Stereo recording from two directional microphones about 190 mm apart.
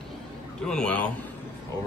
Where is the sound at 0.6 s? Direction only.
5° left (ahead or behind).